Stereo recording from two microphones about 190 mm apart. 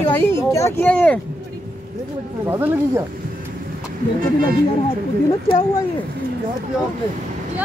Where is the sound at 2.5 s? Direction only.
15° right (ahead or behind).